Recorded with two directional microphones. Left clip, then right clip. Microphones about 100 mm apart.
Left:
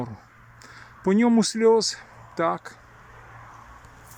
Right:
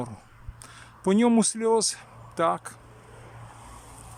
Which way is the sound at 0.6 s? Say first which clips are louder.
Left 2 dB; 5° left (ahead or behind).